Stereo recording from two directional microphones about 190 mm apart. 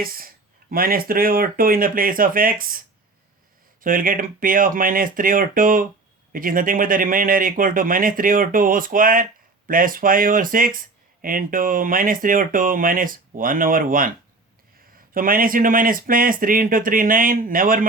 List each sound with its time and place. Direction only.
0.0 s speech: 50° right (ahead or behind)
15.1 s speech: 45° right (ahead or behind)